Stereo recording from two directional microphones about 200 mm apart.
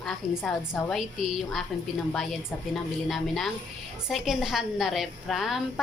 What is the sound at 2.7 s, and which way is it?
A woman's voice, centre (ahead or behind).